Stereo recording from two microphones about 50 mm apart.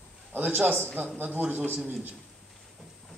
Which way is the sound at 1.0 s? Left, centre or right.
Right.